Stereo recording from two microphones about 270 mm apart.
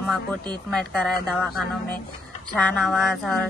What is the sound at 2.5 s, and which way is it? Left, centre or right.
Speech, centre.